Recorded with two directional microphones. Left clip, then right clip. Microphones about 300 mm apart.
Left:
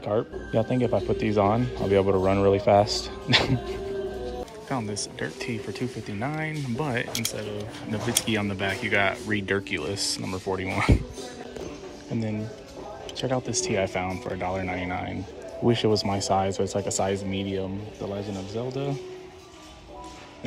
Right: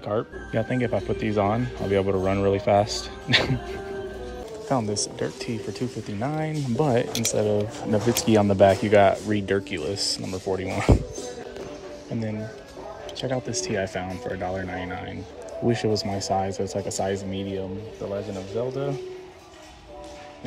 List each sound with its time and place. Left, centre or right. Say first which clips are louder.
0.0 s speech: left 1 dB; centre
0.5 s a man's voice: left 1 dB; right
0.8 s speech: left 1 dB; centre
13.4 s speech: left 1 dB; centre
14.6 s speech: left 1 dB; left
15.7 s speech: left 2 dB; centre